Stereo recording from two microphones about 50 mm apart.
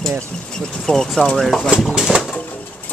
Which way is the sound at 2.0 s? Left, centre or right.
Centre.